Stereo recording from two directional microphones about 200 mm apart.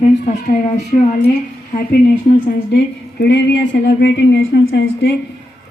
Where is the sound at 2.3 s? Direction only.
45° left (ahead or behind).